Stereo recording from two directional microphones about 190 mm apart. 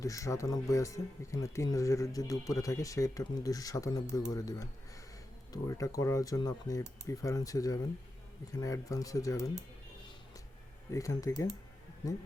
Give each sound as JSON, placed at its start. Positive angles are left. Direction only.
{"t": 0.0, "sound": "speech", "side_deg": 15}
{"t": 10.9, "sound": "speech", "side_deg": 15}